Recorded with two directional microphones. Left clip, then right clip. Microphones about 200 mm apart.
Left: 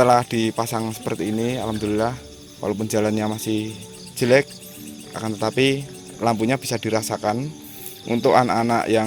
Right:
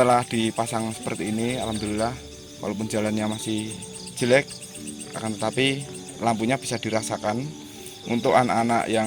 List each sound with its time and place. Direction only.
0.0 s speech: 60° left (ahead or behind)